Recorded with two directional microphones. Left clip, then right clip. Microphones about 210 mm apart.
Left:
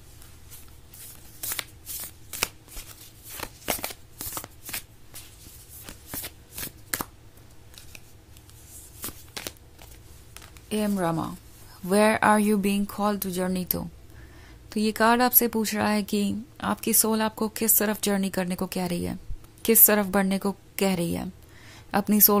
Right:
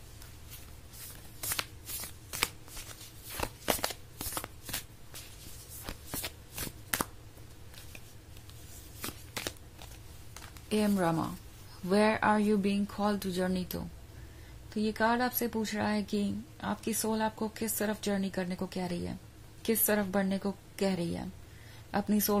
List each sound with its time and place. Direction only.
3.3 s shuffling cards: centre (ahead or behind)
6.1 s shuffling cards: 5° left (ahead or behind)
9.0 s a sound: centre (ahead or behind)
10.7 s speech: 15° left (ahead or behind); by 22.4 s 35° left (ahead or behind)